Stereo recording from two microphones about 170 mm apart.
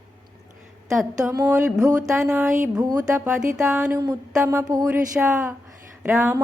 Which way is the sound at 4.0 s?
20° right (ahead or behind).